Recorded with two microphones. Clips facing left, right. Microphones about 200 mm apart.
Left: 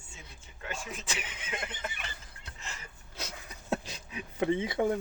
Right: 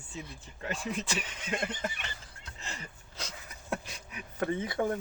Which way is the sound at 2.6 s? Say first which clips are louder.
Right 3 dB; 35° right (ahead or behind).